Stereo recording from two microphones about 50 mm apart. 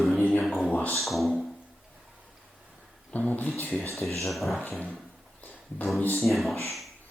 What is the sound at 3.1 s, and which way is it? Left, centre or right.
Speech, left.